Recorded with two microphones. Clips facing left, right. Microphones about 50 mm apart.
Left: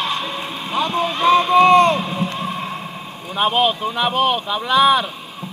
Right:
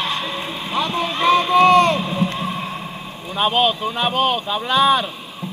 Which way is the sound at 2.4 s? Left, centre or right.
Centre.